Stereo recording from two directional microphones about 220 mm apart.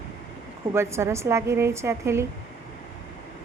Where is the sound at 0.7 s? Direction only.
10° right (ahead or behind).